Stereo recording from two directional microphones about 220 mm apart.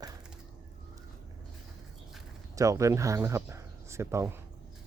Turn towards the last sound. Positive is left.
turn(degrees=-10)  # may be behind; listen again after turning